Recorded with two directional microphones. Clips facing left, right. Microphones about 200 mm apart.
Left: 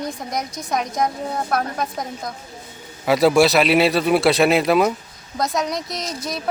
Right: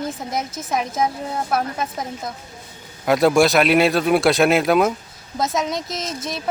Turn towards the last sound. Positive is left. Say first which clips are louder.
# even
turn(degrees=0)  # may be behind; listen again after turning